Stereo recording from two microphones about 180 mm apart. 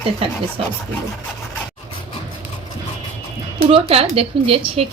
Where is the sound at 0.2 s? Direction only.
30° right (ahead or behind).